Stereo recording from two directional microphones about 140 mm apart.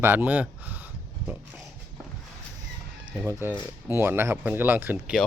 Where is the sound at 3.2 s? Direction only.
15° right (ahead or behind).